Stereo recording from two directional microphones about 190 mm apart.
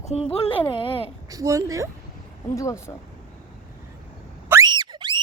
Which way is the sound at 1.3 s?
15° right (ahead or behind).